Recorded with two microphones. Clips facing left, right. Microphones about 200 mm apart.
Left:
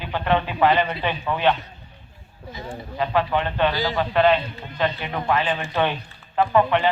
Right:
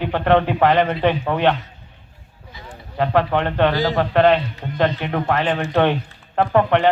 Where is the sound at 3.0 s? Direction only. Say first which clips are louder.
Right 4 dB; 65° right (ahead or behind).